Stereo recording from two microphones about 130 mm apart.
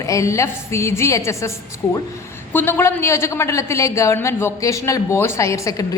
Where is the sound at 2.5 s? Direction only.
15° left (ahead or behind).